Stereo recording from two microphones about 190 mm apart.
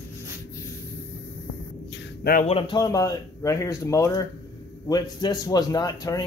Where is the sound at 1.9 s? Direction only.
65° left (ahead or behind).